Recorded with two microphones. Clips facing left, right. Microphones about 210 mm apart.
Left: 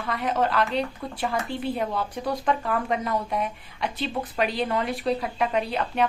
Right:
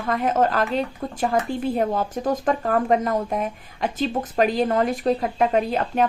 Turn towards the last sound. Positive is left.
turn(degrees=-45)  # may be behind; listen again after turning